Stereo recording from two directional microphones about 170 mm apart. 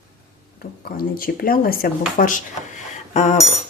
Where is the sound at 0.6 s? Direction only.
60° left (ahead or behind).